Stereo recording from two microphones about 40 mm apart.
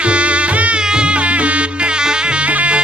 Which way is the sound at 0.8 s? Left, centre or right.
Right.